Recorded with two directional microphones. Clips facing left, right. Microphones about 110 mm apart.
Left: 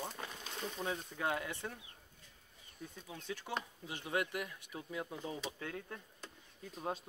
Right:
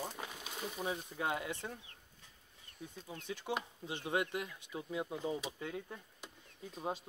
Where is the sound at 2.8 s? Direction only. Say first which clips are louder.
Right 1 dB; 15° right (ahead or behind).